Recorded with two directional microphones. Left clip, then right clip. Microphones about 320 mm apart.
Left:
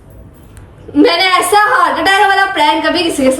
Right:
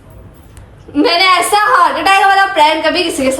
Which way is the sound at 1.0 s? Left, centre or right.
Centre.